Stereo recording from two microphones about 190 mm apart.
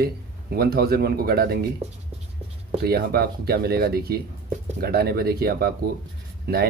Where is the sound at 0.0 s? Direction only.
50° right (ahead or behind).